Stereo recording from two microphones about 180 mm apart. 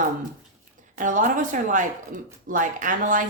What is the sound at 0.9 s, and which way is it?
A woman's voice, 45° right (ahead or behind).